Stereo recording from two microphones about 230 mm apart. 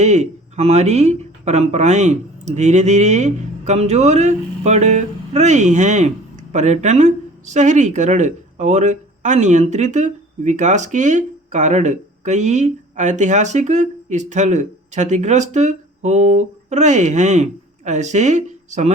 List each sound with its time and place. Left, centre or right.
0.0 s speech: right